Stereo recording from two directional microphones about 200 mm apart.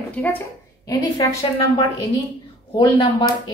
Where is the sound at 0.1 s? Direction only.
10° left (ahead or behind).